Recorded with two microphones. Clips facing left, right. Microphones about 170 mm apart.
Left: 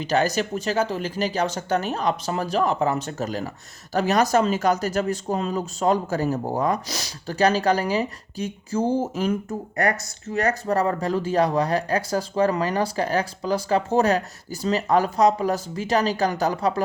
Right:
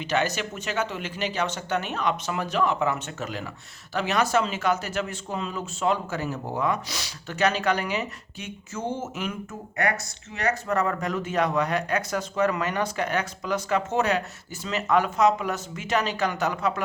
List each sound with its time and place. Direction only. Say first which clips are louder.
0.0 s speech: left 4 dB; 35° left (ahead or behind)